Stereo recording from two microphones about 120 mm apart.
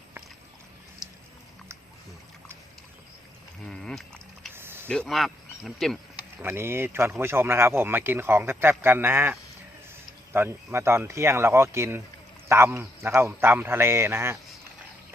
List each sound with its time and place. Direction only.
3.7 s a sound: 5° left (ahead or behind)
4.5 s mechanisms: 20° right (ahead or behind)
4.9 s speech: 5° left (ahead or behind)
6.1 s a man's voice: 20° right (ahead or behind)